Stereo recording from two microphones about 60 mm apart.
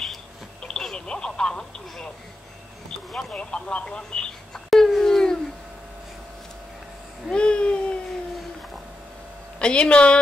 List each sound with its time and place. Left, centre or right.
0.6 s telephone: centre
2.9 s a sound: centre
3.3 s speech: centre
4.6 s wail: centre
7.2 s a sound: centre
9.6 s a woman's voice: centre